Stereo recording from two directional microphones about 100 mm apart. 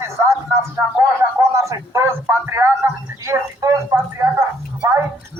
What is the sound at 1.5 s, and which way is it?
A man's voice, 30° right (ahead or behind).